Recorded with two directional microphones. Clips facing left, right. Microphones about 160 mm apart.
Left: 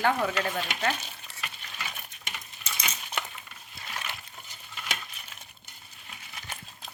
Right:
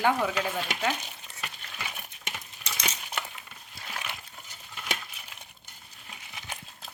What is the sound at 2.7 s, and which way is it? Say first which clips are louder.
Coin: right 1 dB; 70° right (ahead or behind).